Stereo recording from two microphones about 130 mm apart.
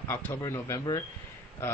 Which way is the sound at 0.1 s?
15° left (ahead or behind).